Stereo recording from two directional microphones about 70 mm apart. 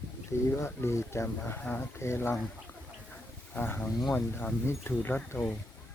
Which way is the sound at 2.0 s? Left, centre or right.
Left.